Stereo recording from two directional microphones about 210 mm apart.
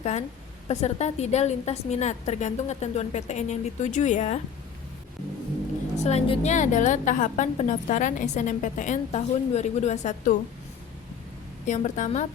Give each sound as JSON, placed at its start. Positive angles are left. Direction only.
{"t": 0.0, "sound": "a woman's voice", "side_deg": 30}
{"t": 6.0, "sound": "a woman's voice", "side_deg": 30}
{"t": 11.6, "sound": "a woman's voice", "side_deg": 35}